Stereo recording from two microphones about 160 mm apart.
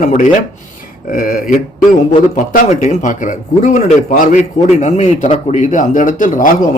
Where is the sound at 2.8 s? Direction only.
50° left (ahead or behind).